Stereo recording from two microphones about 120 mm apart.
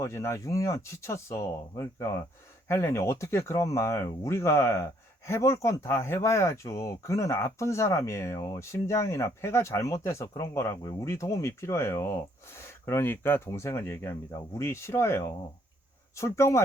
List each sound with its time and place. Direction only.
0.0 s speech: 20° left (ahead or behind)